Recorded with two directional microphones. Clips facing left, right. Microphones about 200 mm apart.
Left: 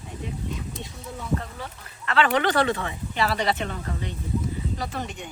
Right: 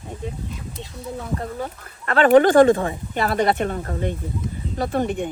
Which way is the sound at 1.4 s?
45° right (ahead or behind).